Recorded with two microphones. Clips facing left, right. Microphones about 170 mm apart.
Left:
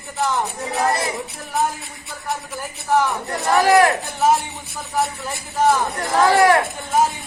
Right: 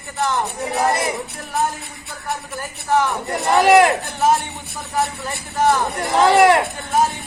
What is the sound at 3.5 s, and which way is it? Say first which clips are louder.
Speech: right 2 dB; 20° right (ahead or behind).